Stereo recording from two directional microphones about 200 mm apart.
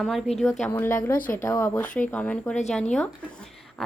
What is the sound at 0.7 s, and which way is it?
Speech, 10° left (ahead or behind).